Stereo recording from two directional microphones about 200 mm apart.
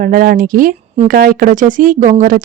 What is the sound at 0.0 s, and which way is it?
Speech, 45° right (ahead or behind).